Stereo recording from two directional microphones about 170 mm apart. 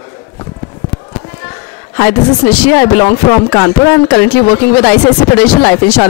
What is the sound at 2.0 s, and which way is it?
Speech, 15° left (ahead or behind).